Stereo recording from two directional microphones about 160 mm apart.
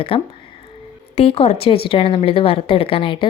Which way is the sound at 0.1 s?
35° left (ahead or behind).